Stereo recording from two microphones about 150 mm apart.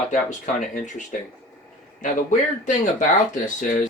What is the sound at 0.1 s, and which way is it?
Speech, 60° left (ahead or behind).